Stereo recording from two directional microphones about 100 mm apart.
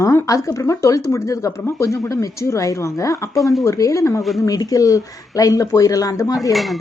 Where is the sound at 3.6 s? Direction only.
30° left (ahead or behind).